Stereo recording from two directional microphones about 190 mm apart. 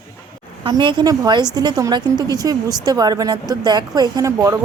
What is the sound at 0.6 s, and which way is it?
A woman's voice, 25° right (ahead or behind).